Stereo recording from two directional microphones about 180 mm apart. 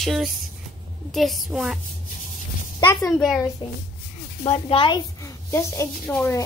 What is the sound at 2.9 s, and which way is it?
Speech, 15° left (ahead or behind).